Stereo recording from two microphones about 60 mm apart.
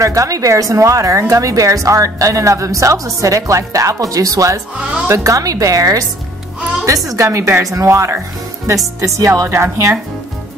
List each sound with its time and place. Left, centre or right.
0.0 s a woman's voice: right
7.1 s a woman's voice: right
8.6 s a woman's voice: right